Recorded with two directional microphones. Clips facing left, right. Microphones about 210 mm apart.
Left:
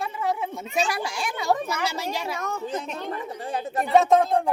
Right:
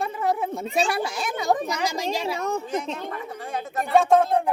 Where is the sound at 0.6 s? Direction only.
30° right (ahead or behind); by 2.0 s 15° right (ahead or behind).